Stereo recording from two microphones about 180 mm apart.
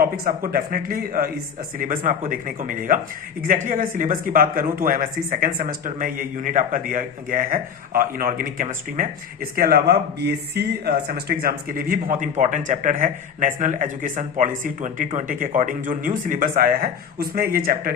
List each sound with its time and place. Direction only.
0.0 s speech: 55° right (ahead or behind)